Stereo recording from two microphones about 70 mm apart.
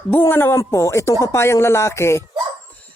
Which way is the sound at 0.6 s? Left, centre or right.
Left.